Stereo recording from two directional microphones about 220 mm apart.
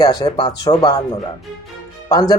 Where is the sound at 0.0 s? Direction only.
20° left (ahead or behind).